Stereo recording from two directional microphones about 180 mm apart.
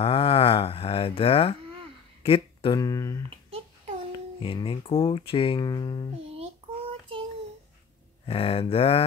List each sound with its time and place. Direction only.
0.0 s cattle: 30° left (ahead or behind)
2.2 s speech: 30° left (ahead or behind)
3.3 s a sound: 30° right (ahead or behind)
4.4 s speech: 30° left (ahead or behind)
8.3 s speech: 30° left (ahead or behind)